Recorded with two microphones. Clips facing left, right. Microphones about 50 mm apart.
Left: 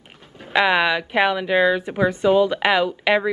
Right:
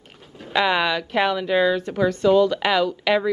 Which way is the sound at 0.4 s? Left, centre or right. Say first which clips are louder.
Left 2 dB; centre.